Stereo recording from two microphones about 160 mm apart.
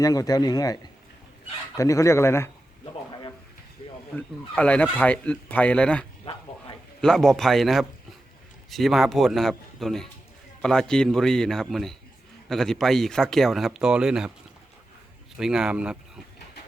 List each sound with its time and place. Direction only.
0.0 s speech: 25° left (ahead or behind)
4.1 s speech: 10° left (ahead or behind)
15.4 s speech: 5° right (ahead or behind)